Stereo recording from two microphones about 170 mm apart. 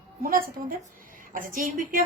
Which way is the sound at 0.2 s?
60° right (ahead or behind).